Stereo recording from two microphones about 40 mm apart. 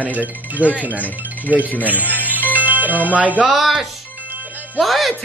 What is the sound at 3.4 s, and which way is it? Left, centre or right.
Speech, centre.